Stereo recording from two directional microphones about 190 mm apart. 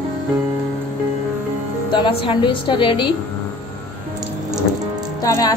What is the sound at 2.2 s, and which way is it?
Speech, 25° left (ahead or behind).